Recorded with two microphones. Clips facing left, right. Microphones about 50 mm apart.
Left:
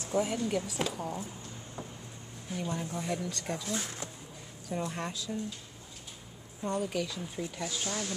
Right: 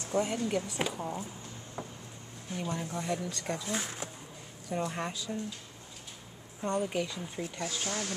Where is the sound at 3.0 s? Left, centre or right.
Centre.